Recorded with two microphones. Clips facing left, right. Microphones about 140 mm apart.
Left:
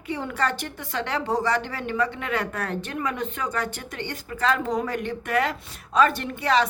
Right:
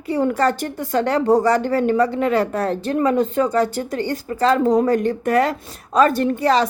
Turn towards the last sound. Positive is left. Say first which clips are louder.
# right 6 dB
turn(degrees=-35)  # may be behind; listen again after turning